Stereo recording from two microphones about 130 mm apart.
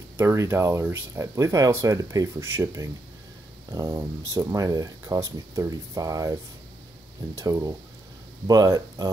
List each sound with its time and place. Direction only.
0.2 s speech: 20° right (ahead or behind)
7.3 s speech: 25° right (ahead or behind)